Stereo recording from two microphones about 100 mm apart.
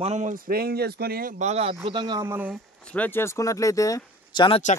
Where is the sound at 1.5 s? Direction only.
90° right; by 2.0 s 70° right (ahead or behind).